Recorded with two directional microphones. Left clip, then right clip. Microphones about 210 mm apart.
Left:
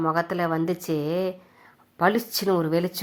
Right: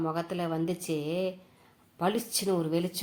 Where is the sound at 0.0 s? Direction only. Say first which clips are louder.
Left 8 dB; 25° left (ahead or behind).